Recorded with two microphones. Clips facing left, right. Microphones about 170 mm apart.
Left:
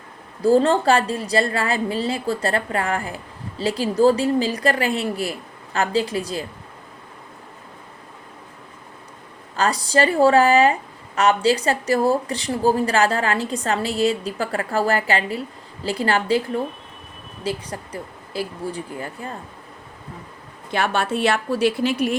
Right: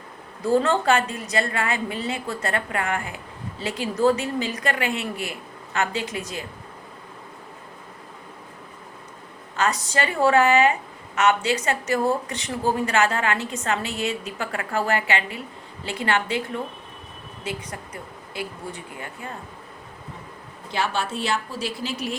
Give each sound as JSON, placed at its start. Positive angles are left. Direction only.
{"t": 0.4, "sound": "a woman's voice", "side_deg": 30}
{"t": 9.6, "sound": "a woman's voice", "side_deg": 35}
{"t": 17.4, "sound": "a woman's voice", "side_deg": 35}
{"t": 20.7, "sound": "a woman's voice", "side_deg": 60}